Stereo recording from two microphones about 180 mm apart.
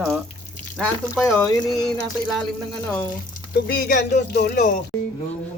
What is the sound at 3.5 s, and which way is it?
Speech, 60° left (ahead or behind).